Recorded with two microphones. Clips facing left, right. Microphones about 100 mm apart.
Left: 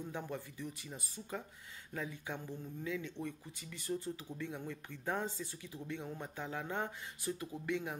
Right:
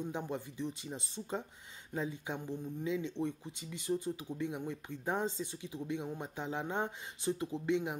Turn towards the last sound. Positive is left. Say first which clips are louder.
# right 5 dB
turn(degrees=-20)  # may be behind; listen again after turning